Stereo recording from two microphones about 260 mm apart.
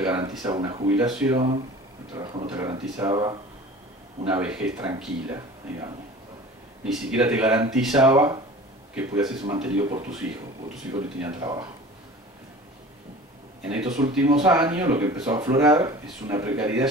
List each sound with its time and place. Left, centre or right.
0.0 s speech: centre
1.3 s speech: centre
2.5 s speech: centre
4.3 s speech: centre
11.3 s speech: centre
13.8 s speech: right
14.4 s speech: centre